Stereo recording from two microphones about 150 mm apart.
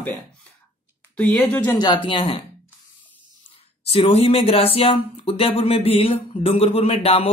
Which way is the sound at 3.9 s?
40° left (ahead or behind).